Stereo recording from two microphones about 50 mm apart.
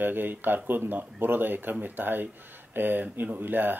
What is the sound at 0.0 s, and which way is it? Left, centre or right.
Speech, right.